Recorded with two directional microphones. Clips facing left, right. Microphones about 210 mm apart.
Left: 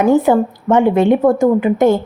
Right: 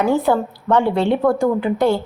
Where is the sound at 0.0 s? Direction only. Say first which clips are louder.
Left 5 dB; 15° left (ahead or behind).